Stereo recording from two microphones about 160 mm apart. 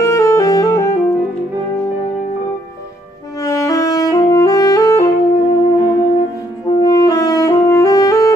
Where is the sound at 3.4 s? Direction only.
20° left (ahead or behind).